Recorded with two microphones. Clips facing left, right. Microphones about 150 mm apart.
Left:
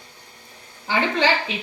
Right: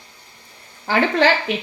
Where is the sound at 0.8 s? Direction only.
60° right (ahead or behind).